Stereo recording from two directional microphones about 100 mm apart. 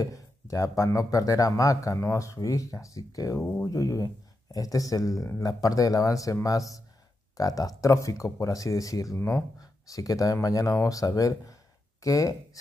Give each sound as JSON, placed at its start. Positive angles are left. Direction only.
{"t": 0.0, "sound": "speech", "side_deg": 35}
{"t": 3.3, "sound": "speech", "side_deg": 20}
{"t": 3.6, "sound": "speech", "side_deg": 35}